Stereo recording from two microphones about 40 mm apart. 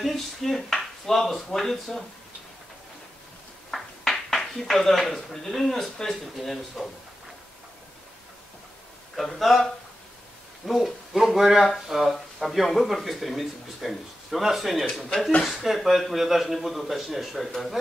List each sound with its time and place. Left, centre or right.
0.0 s speech: centre
3.7 s a sound: centre
5.5 s speech: centre
9.1 s speech: centre
10.7 s speech: centre